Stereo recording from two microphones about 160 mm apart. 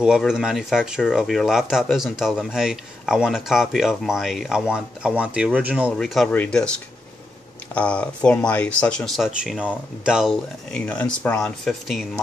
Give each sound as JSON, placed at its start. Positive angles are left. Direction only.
{"t": 0.0, "sound": "speech", "side_deg": -5}
{"t": 7.7, "sound": "speech", "side_deg": 10}